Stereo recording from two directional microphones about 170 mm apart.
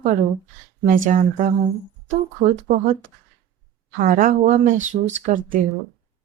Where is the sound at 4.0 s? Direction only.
50° right (ahead or behind).